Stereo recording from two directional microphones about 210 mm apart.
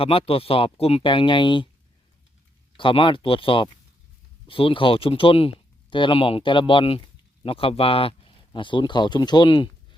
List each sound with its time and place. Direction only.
0.0 s speech: 25° left (ahead or behind)
2.7 s speech: 25° left (ahead or behind)